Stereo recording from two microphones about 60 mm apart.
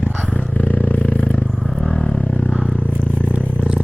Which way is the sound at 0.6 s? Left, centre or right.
Left.